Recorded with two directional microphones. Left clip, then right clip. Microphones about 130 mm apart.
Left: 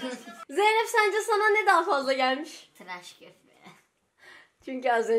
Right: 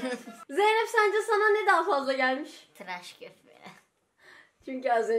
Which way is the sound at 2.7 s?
40° right (ahead or behind).